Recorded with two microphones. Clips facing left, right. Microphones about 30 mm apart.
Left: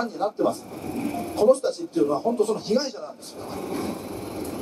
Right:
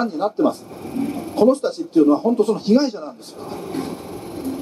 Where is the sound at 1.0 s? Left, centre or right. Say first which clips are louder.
Right 6 dB; centre.